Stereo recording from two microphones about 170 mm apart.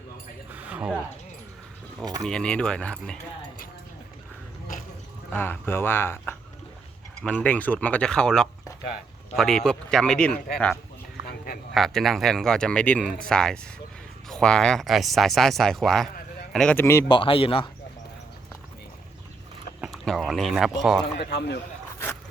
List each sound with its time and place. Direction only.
0.5 s a sound: 10° right (ahead or behind)
2.2 s speech: 5° left (ahead or behind)
5.3 s speech: 15° left (ahead or behind)
11.7 s speech: centre (ahead or behind)
17.1 s speech: 30° left (ahead or behind)
19.8 s a sound: centre (ahead or behind)
21.2 s a man's voice: 80° left